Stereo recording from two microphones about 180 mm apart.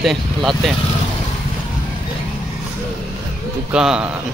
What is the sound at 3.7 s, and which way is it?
Speech, 5° right (ahead or behind).